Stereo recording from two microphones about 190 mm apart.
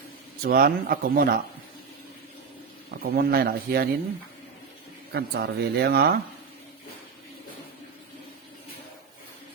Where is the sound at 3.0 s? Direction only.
55° right (ahead or behind).